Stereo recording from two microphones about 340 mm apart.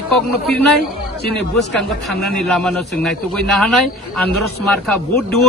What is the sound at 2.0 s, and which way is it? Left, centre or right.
A man's voice, centre.